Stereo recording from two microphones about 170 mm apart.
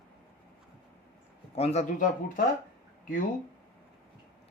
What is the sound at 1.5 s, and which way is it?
Speech, 40° left (ahead or behind).